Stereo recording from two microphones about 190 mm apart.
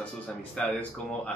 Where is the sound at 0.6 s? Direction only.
5° left (ahead or behind).